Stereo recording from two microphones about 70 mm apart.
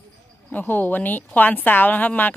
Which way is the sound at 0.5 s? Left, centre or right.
Left.